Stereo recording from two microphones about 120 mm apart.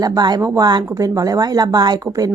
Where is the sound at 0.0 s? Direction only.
35° right (ahead or behind).